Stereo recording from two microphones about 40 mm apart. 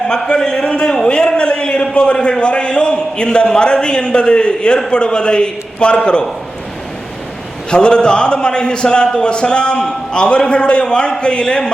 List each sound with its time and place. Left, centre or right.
0.1 s a man's voice: centre
1.0 s a sound: left
2.4 s a man's voice: left
7.7 s a man's voice: left